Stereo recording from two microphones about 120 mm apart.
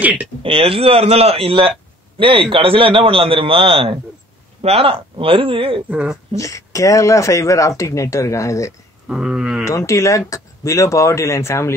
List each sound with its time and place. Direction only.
0.0 s speech: 10° right (ahead or behind)
0.4 s a man's voice: 50° right (ahead or behind)
5.9 s speech: 10° right (ahead or behind)
6.3 s speech: 25° left (ahead or behind)
9.1 s speech: 5° right (ahead or behind)
9.7 s speech: 25° left (ahead or behind)